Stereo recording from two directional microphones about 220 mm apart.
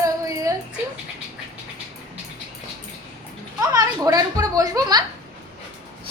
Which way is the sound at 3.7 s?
15° right (ahead or behind).